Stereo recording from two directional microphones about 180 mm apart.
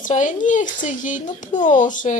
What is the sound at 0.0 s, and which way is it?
Speech, 45° left (ahead or behind).